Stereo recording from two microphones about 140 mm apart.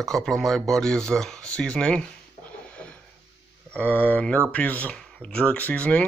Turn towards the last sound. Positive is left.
turn(degrees=10)  # may be behind; listen again after turning